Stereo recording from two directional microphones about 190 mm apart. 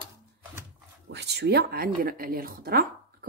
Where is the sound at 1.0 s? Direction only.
60° right (ahead or behind).